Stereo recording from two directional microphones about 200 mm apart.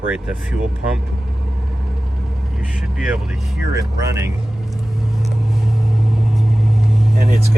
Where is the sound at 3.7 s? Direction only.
15° right (ahead or behind).